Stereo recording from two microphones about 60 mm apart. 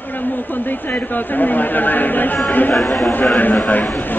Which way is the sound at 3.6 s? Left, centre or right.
Left.